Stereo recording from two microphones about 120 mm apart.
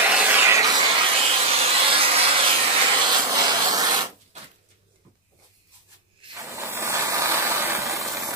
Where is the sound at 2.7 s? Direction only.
40° right (ahead or behind).